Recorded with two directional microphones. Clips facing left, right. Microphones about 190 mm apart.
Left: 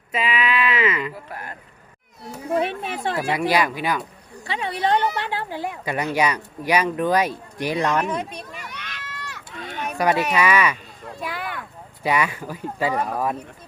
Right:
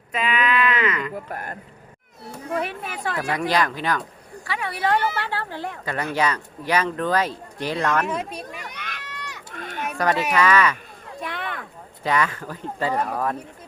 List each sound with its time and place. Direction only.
0.1 s a sound: 5° left (ahead or behind)
1.3 s speech: 45° right (ahead or behind)
2.6 s speech: 25° left (ahead or behind)
3.3 s speech: 10° left (ahead or behind)
4.4 s speech: 25° left (ahead or behind)
8.0 s speech: 5° right (ahead or behind)
8.6 s a sound: 50° right (ahead or behind)
9.0 s run: 15° right (ahead or behind)
9.5 s a sound: 50° right (ahead or behind)
10.0 s speech: 10° left (ahead or behind)
11.2 s a sound: 5° left (ahead or behind)
12.0 s speech: 10° left (ahead or behind)